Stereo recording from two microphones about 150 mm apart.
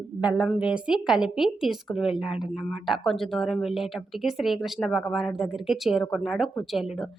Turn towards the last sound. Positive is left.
turn(degrees=0)  # may be behind; listen again after turning